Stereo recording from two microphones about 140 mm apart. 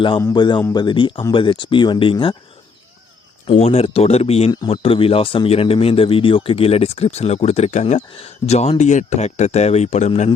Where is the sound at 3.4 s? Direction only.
50° left (ahead or behind).